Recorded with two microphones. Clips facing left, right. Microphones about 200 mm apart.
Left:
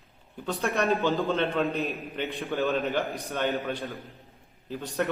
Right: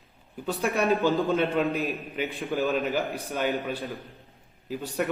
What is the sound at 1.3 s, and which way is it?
Speech, 10° right (ahead or behind).